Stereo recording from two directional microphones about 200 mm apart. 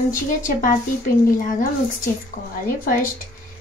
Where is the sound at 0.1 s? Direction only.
40° left (ahead or behind).